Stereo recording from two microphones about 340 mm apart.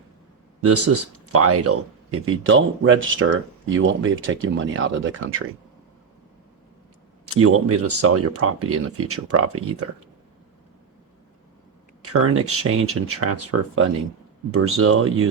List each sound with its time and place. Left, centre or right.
0.6 s speech: right
7.3 s speech: right
12.0 s speech: right